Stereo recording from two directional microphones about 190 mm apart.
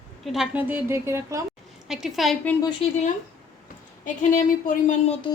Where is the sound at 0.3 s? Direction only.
5° right (ahead or behind).